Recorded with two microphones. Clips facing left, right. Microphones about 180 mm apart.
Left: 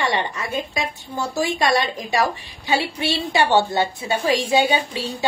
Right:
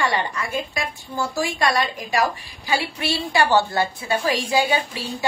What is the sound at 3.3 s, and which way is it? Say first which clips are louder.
A woman's voice: left 1 dB; 25° left (ahead or behind).